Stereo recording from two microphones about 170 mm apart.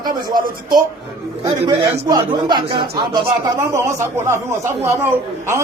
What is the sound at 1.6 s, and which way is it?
A man's voice, 25° right (ahead or behind).